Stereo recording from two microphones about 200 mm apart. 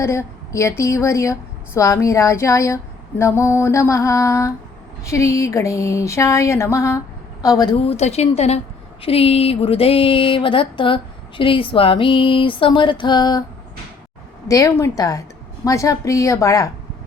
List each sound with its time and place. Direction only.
0.0 s a woman's voice: 15° left (ahead or behind)
14.4 s a woman's voice: 15° left (ahead or behind)